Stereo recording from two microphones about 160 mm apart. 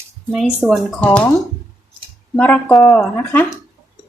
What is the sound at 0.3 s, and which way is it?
A woman's voice, centre (ahead or behind).